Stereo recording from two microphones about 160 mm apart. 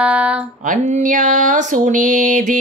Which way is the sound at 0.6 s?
50° right (ahead or behind).